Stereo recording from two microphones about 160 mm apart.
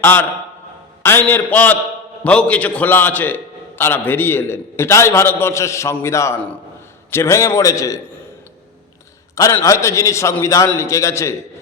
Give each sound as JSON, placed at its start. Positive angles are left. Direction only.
{"t": 0.0, "sound": "a man's voice", "side_deg": 10}
{"t": 9.3, "sound": "a man's voice", "side_deg": 15}